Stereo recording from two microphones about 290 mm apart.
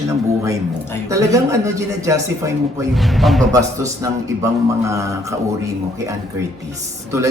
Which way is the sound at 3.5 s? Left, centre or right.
Centre.